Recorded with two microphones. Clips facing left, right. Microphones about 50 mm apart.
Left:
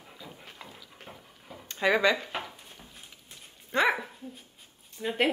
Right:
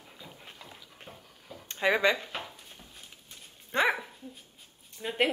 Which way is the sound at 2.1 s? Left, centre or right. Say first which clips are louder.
Left 3 dB; centre.